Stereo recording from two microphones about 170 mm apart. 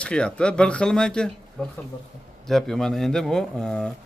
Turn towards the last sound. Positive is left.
turn(degrees=5)  # may be behind; listen again after turning